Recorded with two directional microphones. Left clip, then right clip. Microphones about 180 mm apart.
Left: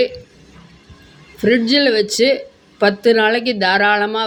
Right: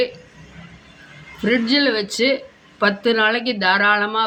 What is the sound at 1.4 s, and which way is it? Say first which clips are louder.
Speech: left 4 dB; 50° left (ahead or behind).